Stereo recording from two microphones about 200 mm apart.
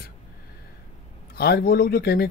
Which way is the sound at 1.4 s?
55° left (ahead or behind).